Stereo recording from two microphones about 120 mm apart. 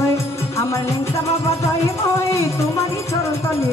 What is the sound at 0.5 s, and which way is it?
Music, 25° left (ahead or behind).